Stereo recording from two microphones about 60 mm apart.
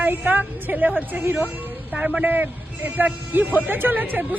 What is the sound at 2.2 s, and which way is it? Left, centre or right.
A woman's voice, right.